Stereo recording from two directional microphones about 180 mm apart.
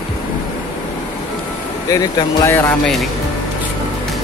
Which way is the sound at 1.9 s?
15° left (ahead or behind).